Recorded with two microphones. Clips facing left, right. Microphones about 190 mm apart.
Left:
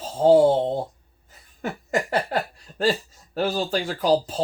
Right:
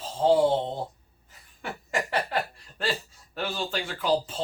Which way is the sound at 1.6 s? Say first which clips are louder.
Left 5 dB; 45° left (ahead or behind).